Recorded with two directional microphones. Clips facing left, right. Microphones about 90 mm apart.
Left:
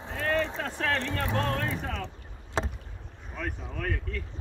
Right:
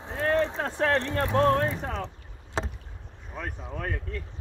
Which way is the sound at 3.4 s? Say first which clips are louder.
Even; 15° right (ahead or behind).